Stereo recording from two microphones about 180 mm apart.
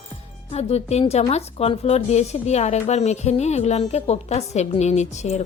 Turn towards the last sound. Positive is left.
turn(degrees=40)  # may be behind; listen again after turning